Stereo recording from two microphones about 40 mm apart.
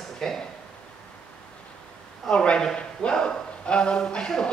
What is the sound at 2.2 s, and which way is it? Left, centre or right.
Speech, left.